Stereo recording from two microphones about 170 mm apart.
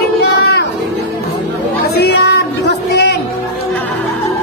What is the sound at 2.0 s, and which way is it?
Music, 75° left (ahead or behind).